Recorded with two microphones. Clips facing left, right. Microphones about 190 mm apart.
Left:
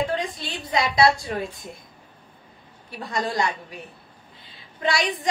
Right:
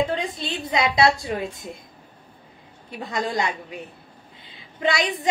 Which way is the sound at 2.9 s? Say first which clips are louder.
Right 1 dB; 20° right (ahead or behind).